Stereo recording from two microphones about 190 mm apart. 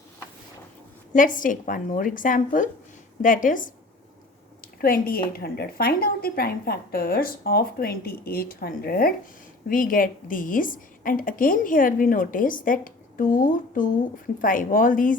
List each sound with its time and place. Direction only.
1.1 s a woman's voice: 45° left (ahead or behind)